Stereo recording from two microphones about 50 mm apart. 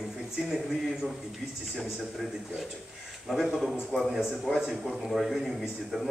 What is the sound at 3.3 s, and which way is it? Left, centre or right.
A man's voice, centre.